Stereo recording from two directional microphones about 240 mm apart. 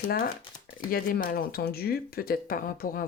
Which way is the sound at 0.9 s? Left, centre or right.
Left.